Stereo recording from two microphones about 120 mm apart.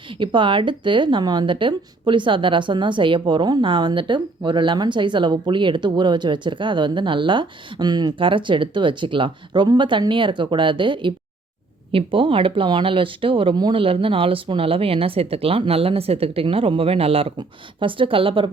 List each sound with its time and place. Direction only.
0.1 s a woman's voice: 45° right (ahead or behind)